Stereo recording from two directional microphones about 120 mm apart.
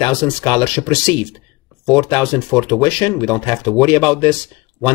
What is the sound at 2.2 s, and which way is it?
Speech, 20° left (ahead or behind).